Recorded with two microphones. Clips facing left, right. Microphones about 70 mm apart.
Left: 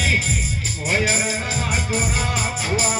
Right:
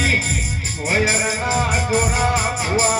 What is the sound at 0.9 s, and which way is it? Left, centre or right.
Music, right.